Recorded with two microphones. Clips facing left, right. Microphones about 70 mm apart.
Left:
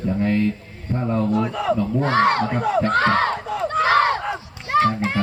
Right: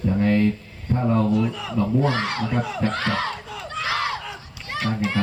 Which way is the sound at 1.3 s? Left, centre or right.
Left.